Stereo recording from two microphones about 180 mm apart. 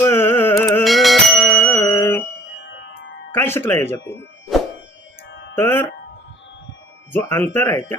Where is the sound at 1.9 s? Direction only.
15° left (ahead or behind).